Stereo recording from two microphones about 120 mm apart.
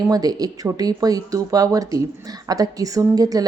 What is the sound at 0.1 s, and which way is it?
A woman's voice, 30° right (ahead or behind).